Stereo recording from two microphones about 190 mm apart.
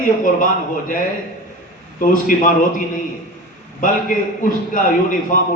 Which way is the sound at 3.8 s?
45° left (ahead or behind).